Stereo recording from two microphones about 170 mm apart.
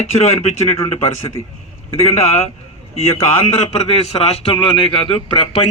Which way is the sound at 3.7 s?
35° left (ahead or behind).